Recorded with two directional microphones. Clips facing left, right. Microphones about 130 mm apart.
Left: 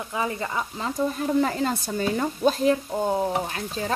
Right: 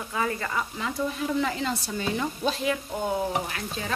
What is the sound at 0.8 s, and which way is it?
Speech, 40° left (ahead or behind).